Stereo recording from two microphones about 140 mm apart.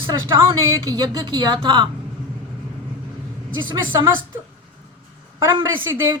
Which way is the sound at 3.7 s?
35° right (ahead or behind).